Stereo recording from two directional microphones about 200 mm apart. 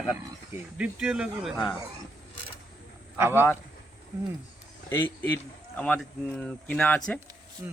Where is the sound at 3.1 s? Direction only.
10° right (ahead or behind).